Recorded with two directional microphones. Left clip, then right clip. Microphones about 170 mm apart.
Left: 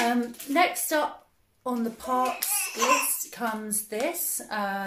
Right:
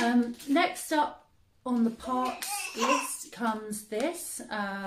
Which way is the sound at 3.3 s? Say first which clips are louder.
Even; 15° right (ahead or behind).